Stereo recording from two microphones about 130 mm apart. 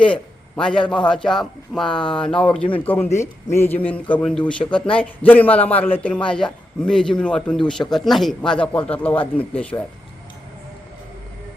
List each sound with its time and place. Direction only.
0.0 s a man's voice: 5° left (ahead or behind)
2.6 s speech: 40° left (ahead or behind)
2.8 s a man's voice: 15° left (ahead or behind)
4.1 s a man's voice: 5° left (ahead or behind)